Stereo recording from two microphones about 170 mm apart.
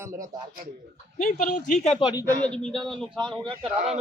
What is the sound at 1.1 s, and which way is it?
Speech, 50° left (ahead or behind).